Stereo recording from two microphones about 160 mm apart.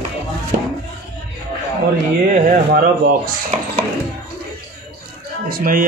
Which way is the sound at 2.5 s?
65° right (ahead or behind).